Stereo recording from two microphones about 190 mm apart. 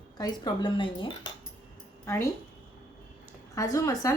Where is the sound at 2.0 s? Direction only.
15° left (ahead or behind).